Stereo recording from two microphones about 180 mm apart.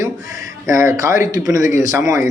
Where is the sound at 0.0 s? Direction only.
20° right (ahead or behind).